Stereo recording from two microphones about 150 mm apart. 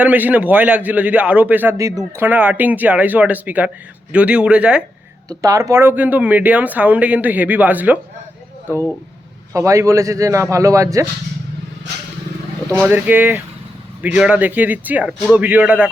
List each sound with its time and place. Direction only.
0.0 s speech: 10° right (ahead or behind)
5.3 s speech: 25° right (ahead or behind)
9.5 s a man's voice: 20° right (ahead or behind)
12.7 s speech: 15° right (ahead or behind)